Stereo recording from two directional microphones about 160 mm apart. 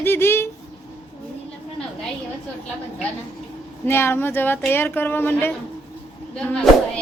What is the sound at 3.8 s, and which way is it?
Speech, 15° left (ahead or behind).